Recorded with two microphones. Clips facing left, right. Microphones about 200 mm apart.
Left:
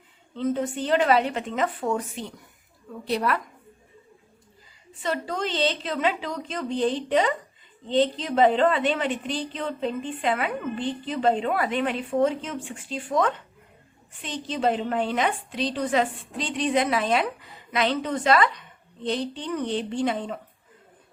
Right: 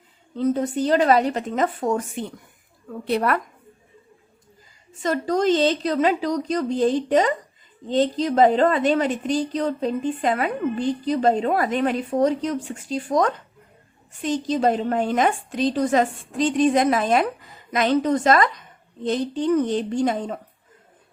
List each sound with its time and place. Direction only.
0.3 s a woman's voice: 40° right (ahead or behind)
5.0 s a woman's voice: 45° right (ahead or behind)